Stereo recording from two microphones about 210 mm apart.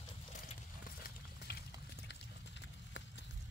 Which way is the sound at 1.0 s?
50° left (ahead or behind).